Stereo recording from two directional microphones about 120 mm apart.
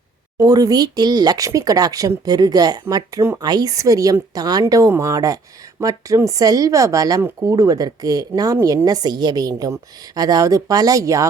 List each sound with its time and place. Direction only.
0.3 s a woman's voice: 30° right (ahead or behind)